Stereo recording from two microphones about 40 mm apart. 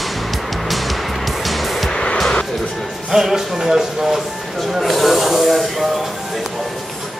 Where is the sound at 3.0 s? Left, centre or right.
Centre.